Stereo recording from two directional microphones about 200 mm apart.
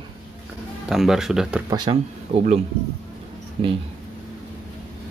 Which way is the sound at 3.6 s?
30° right (ahead or behind).